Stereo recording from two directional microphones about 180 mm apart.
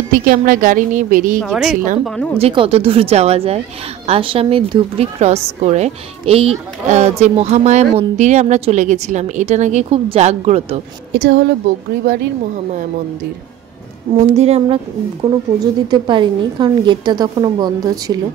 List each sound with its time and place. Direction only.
0.2 s a woman's voice: 50° right (ahead or behind)
1.4 s a woman's voice: centre (ahead or behind)
2.3 s a woman's voice: 30° right (ahead or behind)
11.1 s a woman's voice: 75° right (ahead or behind)
14.1 s a woman's voice: 35° right (ahead or behind)
15.6 s a woman's voice: 25° right (ahead or behind)